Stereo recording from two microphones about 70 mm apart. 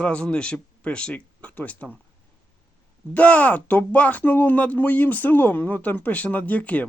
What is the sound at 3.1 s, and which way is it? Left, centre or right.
Speech, left.